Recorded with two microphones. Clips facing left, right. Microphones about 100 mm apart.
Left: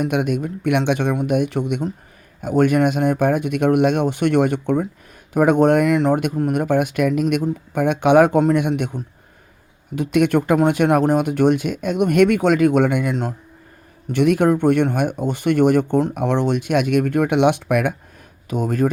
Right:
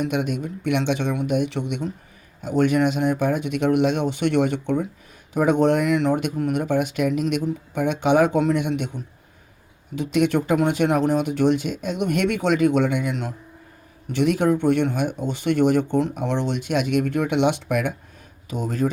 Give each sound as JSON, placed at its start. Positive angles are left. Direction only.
{"t": 0.0, "sound": "speech", "side_deg": 50}